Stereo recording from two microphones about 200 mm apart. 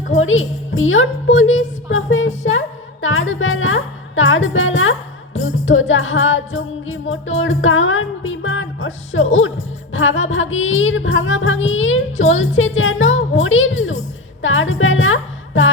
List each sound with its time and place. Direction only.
0.2 s music: 80° left
2.5 s speech: 75° left (ahead or behind)
9.9 s music: 75° left (ahead or behind)
14.4 s speech: 75° left (ahead or behind)